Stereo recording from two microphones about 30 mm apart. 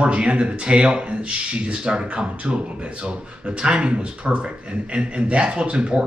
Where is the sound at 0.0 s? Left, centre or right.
Right.